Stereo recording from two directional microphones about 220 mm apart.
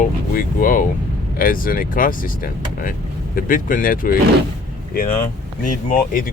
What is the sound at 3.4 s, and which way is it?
Speech, 40° left (ahead or behind).